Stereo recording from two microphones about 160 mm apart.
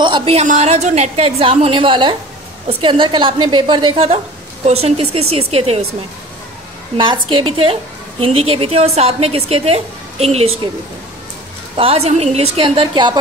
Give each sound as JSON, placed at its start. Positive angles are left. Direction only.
{"t": 0.0, "sound": "a woman's voice", "side_deg": -35}
{"t": 7.0, "sound": "a woman's voice", "side_deg": -30}
{"t": 11.7, "sound": "a woman's voice", "side_deg": -35}